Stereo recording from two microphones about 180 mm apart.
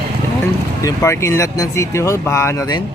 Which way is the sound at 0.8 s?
15° left (ahead or behind).